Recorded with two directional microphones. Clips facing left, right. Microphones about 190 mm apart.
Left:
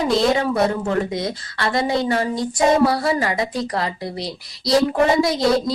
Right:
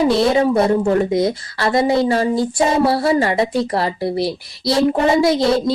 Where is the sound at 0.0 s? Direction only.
30° right (ahead or behind).